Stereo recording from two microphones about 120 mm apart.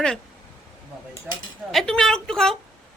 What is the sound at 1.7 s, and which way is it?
Speech, 5° left (ahead or behind).